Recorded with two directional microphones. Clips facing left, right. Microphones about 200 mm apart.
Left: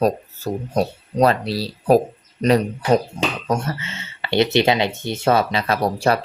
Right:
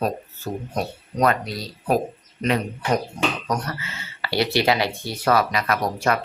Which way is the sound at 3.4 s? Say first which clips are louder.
Left 4 dB; 25° left (ahead or behind).